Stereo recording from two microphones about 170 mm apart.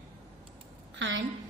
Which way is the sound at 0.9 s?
90° right.